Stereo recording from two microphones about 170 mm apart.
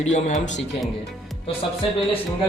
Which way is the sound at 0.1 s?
45° left (ahead or behind).